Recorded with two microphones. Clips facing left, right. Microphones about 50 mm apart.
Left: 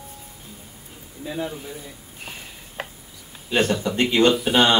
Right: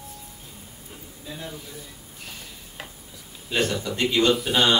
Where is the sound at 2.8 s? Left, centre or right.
Left.